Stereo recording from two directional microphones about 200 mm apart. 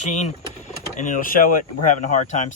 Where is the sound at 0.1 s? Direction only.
35° left (ahead or behind).